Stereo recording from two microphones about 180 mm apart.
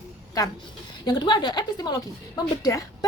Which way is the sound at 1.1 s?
25° left (ahead or behind).